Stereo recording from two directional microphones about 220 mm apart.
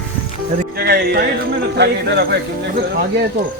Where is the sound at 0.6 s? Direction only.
45° right (ahead or behind).